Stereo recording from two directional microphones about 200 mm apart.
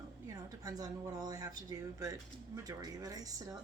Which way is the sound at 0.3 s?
20° right (ahead or behind).